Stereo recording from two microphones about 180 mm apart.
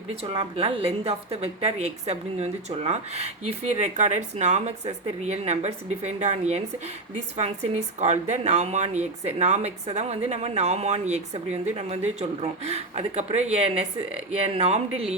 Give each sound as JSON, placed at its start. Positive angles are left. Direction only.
{"t": 0.1, "sound": "a woman's voice", "side_deg": -30}